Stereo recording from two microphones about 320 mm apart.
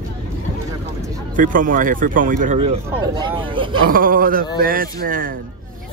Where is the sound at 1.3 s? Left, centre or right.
Right.